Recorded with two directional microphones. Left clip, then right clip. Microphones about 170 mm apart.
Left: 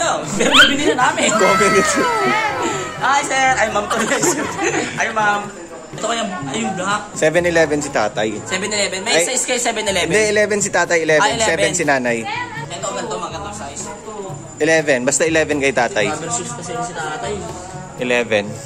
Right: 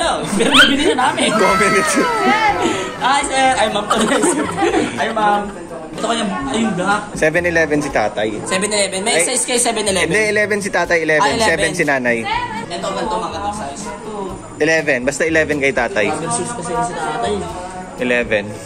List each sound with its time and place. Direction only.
0.0 s a man's voice: 5° left (ahead or behind)
8.5 s a woman's voice: 30° right (ahead or behind); by 9.8 s 10° right (ahead or behind)
9.8 s a man's voice: 10° left (ahead or behind)
14.6 s a man's voice: 25° left (ahead or behind)
18.0 s a man's voice: 25° left (ahead or behind)